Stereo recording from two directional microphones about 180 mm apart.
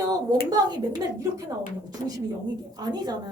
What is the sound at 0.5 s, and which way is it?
A woman's voice, 20° right (ahead or behind).